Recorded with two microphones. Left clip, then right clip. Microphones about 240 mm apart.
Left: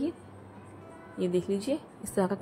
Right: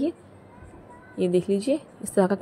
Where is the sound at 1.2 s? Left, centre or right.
Centre.